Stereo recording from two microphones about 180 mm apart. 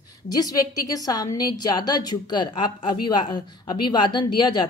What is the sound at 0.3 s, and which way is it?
A woman's voice, 20° left (ahead or behind).